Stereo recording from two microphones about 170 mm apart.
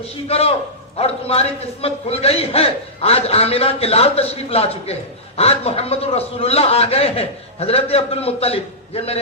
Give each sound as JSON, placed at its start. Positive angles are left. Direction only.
{"t": 0.3, "sound": "a man's voice", "side_deg": 35}